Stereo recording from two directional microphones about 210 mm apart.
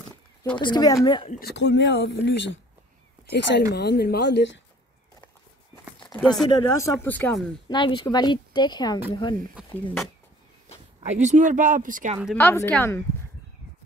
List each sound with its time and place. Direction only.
0.6 s speech: 20° left (ahead or behind)
1.4 s speech: 55° left (ahead or behind)
6.1 s speech: centre (ahead or behind)
6.5 s speech: 10° left (ahead or behind)
7.6 s speech: 20° left (ahead or behind)
11.0 s speech: 35° right (ahead or behind)
12.4 s speech: 10° left (ahead or behind)